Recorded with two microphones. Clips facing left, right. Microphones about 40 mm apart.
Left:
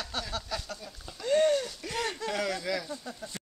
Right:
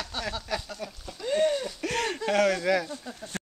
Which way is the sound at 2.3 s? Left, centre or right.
Right.